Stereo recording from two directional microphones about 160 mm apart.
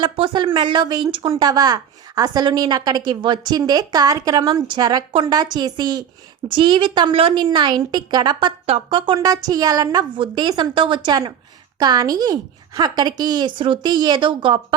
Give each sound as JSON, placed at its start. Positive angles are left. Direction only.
{"t": 0.0, "sound": "a woman's voice", "side_deg": -30}